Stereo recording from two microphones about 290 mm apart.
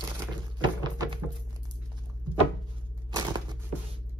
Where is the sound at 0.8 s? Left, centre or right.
Centre.